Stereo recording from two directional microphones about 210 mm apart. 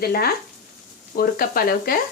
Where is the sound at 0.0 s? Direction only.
45° left (ahead or behind).